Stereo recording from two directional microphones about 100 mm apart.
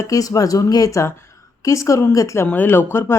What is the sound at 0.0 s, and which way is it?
Speech, 35° left (ahead or behind).